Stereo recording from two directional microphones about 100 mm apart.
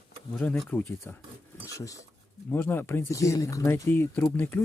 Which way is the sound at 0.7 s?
15° left (ahead or behind).